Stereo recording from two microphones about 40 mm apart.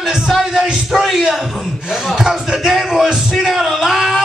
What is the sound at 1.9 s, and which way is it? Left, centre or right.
Speech, centre.